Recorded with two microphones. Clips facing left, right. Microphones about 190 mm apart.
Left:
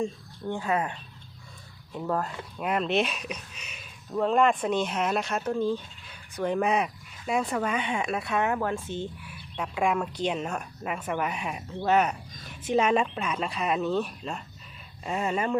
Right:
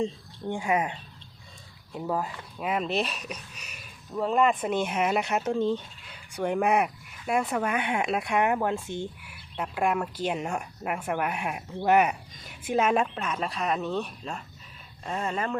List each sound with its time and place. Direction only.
0.0 s a woman's voice: 15° right (ahead or behind)
6.3 s speech: 10° right (ahead or behind)
9.6 s speech: 5° right (ahead or behind)